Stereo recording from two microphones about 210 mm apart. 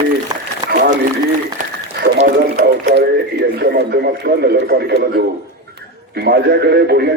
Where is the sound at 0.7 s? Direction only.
40° right (ahead or behind).